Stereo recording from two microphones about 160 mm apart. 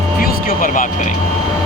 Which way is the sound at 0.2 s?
60° left (ahead or behind).